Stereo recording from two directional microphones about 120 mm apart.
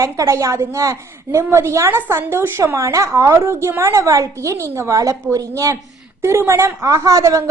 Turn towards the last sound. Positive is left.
turn(degrees=-25)  # may be behind; listen again after turning